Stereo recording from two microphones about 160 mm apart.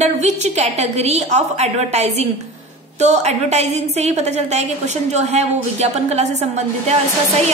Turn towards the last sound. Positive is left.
turn(degrees=-40)  # may be behind; listen again after turning